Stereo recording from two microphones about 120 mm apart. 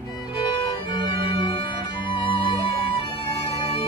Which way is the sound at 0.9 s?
40° left (ahead or behind).